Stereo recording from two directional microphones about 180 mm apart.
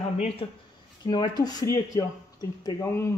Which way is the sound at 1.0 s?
25° left (ahead or behind).